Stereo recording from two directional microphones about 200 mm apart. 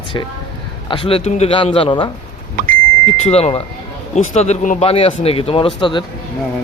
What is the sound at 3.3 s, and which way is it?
Speech, 30° left (ahead or behind).